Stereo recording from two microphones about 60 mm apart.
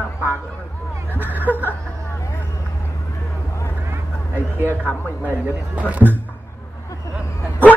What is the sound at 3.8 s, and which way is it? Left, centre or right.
Vehicle, right.